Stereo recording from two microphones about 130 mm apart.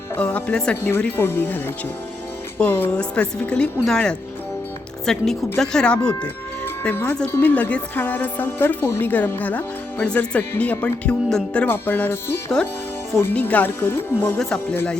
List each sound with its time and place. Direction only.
0.2 s a woman's voice: 10° left (ahead or behind)
14.3 s speech: 5° left (ahead or behind)